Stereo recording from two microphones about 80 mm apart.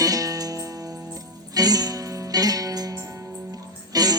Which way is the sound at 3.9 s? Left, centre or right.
Right.